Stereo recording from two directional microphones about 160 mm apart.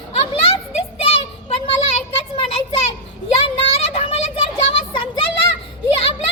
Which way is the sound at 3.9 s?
40° left (ahead or behind).